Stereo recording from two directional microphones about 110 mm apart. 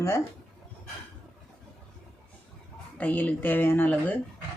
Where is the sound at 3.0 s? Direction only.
15° left (ahead or behind).